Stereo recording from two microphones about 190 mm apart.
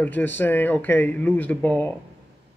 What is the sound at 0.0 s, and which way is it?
A man's voice, 10° left (ahead or behind).